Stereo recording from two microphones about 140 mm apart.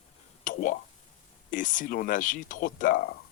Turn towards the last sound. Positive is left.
turn(degrees=85)